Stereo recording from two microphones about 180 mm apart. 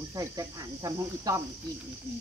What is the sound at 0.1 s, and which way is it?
Speech, 20° right (ahead or behind).